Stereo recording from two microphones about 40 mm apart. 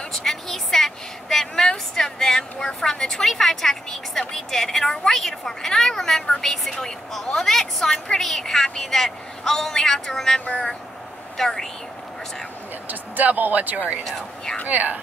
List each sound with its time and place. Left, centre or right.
0.1 s vehicle: centre
2.0 s a woman's voice: centre
12.8 s speech: right